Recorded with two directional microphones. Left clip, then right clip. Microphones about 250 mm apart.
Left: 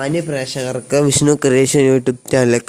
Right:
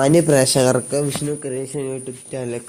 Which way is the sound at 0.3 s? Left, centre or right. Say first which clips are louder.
Right 6 dB; right.